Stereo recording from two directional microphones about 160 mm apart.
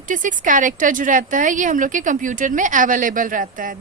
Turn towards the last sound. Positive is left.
turn(degrees=-55)  # may be behind; listen again after turning